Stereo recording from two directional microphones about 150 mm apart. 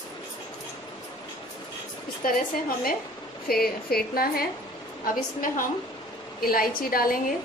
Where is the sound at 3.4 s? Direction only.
90° left.